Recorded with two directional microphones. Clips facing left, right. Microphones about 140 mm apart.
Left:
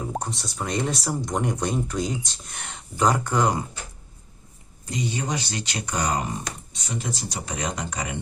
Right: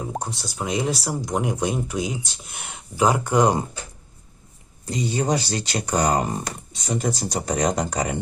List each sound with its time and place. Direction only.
0.1 s speech: centre (ahead or behind)
4.9 s speech: 35° right (ahead or behind)